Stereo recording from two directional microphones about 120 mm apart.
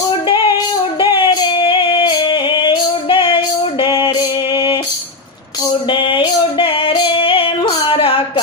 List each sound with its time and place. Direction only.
0.3 s female singing: 45° left (ahead or behind)
3.8 s music: 45° left (ahead or behind)
4.2 s mantra: 45° left (ahead or behind)
5.9 s female singing: 45° left (ahead or behind)
7.9 s a sound: 50° left (ahead or behind)